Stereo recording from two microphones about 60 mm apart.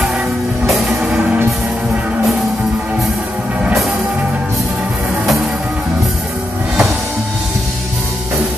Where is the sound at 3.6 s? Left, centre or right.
Centre.